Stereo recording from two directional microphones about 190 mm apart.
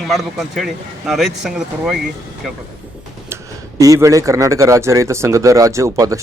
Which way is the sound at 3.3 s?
15° right (ahead or behind).